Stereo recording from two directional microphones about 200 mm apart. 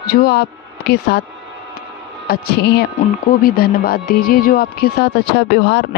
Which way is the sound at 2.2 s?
50° left (ahead or behind).